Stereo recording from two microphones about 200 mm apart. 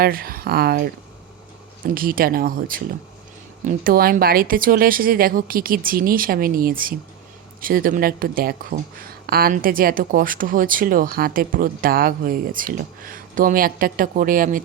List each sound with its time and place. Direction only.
0.0 s speech: 45° right (ahead or behind)